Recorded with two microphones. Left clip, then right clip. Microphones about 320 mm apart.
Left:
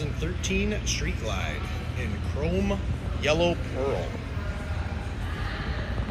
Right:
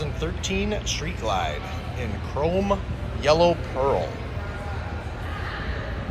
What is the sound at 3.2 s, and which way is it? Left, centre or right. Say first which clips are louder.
Speech: right 6 dB; right.